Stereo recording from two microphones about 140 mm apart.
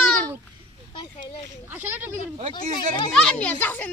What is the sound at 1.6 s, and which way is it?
Speech, 15° right (ahead or behind).